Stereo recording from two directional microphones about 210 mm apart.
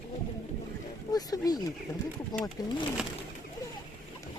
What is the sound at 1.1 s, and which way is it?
Speech, 20° left (ahead or behind).